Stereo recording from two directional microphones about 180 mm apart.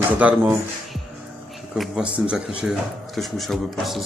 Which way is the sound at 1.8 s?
5° right (ahead or behind).